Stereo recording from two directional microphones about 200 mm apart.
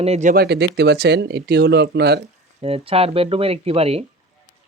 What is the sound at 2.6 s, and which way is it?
Speech, 30° right (ahead or behind).